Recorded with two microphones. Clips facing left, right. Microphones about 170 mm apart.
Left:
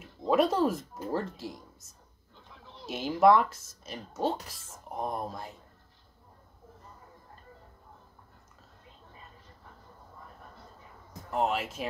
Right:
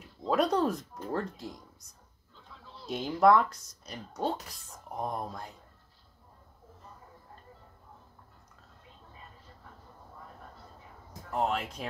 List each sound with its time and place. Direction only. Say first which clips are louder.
0.3 s speech: left 2 dB; 5° left (ahead or behind)
2.6 s a sound: left 2 dB; 15° left (ahead or behind)
2.9 s speech: left 1 dB; 5° left (ahead or behind)
11.3 s speech: left 1 dB; 5° left (ahead or behind)